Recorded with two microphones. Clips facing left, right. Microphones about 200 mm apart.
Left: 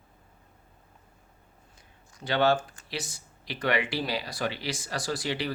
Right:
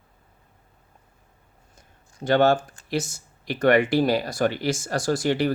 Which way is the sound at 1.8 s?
45° right (ahead or behind).